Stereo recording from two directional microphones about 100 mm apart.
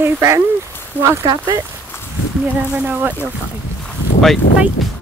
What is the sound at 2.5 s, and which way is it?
Speech, 15° right (ahead or behind).